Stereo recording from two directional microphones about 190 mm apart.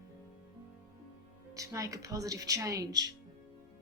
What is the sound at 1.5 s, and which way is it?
A woman's voice, 15° right (ahead or behind).